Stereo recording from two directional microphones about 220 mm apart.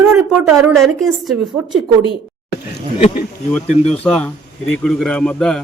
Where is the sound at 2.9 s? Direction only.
30° left (ahead or behind).